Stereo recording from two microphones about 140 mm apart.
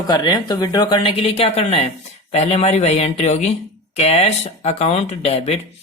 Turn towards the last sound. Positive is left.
turn(degrees=45)  # may be behind; listen again after turning